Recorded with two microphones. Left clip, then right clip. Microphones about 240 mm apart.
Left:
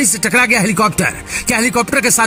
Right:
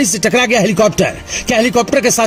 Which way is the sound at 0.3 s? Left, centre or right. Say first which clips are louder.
Even; left.